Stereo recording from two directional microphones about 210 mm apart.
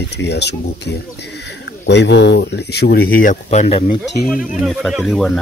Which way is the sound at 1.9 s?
55° left (ahead or behind).